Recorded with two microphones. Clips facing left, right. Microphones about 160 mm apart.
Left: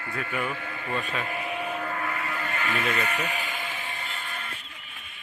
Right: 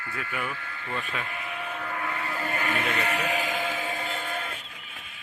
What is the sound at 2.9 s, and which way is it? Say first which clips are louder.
Sheep: right 2 dB; 70° right (ahead or behind).